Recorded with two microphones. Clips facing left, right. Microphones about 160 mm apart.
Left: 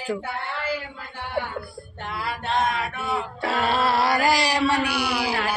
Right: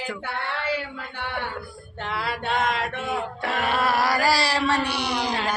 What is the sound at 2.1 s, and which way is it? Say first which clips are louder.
Male singing: even; 80° right.